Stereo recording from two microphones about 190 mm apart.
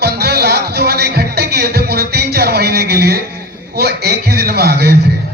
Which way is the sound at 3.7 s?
55° right (ahead or behind).